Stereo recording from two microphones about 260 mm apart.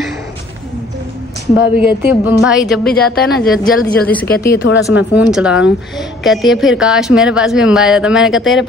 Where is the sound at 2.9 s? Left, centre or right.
Left.